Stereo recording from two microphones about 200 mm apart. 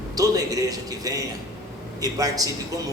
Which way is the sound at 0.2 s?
15° right (ahead or behind).